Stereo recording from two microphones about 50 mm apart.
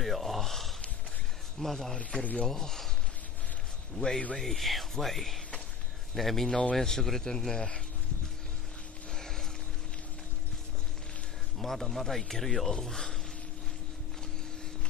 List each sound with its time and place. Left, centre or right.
0.0 s gasp: centre
1.6 s speech: centre
2.0 s a man's voice: left
2.5 s speech: centre
3.9 s speech: centre
9.1 s vehicle: centre
11.5 s speech: centre